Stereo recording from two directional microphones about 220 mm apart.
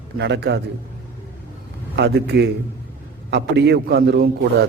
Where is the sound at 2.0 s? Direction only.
50° right (ahead or behind).